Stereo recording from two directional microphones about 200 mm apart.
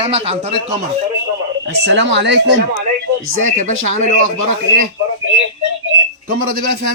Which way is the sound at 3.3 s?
40° right (ahead or behind).